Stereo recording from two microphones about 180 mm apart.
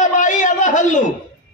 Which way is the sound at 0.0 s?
45° left (ahead or behind).